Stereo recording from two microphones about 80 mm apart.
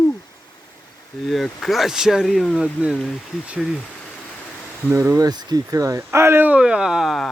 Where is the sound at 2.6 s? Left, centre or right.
Centre.